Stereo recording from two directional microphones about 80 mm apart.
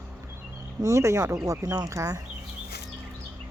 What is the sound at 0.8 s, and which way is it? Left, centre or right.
Speech, right.